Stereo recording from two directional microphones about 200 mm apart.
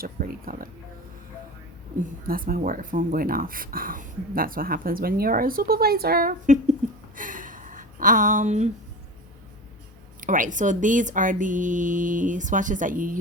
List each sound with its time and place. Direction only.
0.0 s speech: 45° right (ahead or behind)
2.2 s speech: 45° right (ahead or behind)
7.2 s a sound: 40° right (ahead or behind)
10.2 s speech: 40° right (ahead or behind)